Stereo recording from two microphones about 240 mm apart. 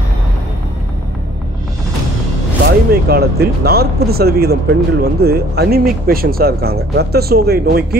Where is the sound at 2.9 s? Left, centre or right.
Right.